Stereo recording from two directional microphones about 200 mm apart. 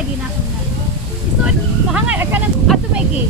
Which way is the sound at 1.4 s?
5° right (ahead or behind).